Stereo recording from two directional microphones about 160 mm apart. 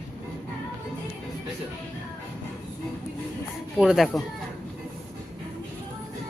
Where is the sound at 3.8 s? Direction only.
Centre (ahead or behind).